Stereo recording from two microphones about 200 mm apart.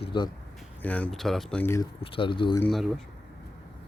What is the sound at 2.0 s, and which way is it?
Speech, 25° left (ahead or behind).